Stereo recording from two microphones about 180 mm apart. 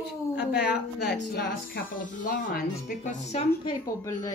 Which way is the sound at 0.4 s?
65° left (ahead or behind).